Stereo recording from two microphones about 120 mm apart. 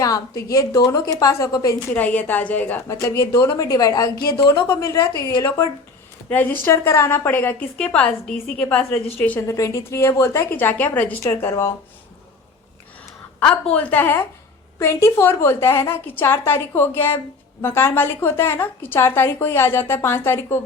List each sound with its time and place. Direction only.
0.0 s a woman's voice: 30° left (ahead or behind)
2.0 s a woman's voice: 10° left (ahead or behind)
2.8 s a woman's voice: 25° left (ahead or behind)
9.5 s a woman's voice: 25° left (ahead or behind)
13.7 s a woman's voice: 15° left (ahead or behind)